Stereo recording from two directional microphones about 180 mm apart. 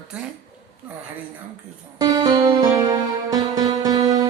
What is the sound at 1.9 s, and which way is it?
Music, 20° right (ahead or behind).